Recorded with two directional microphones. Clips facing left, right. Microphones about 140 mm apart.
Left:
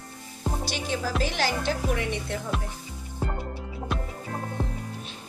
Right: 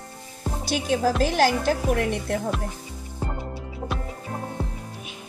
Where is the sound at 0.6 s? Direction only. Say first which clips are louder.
Right 11 dB; 50° right (ahead or behind).